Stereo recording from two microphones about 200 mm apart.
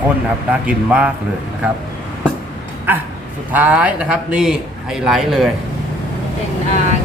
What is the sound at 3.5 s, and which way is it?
A man's voice, 5° right (ahead or behind).